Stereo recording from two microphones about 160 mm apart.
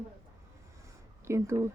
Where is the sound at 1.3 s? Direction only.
15° right (ahead or behind).